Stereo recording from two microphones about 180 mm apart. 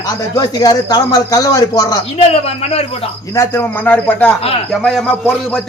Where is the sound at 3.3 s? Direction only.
10° left (ahead or behind).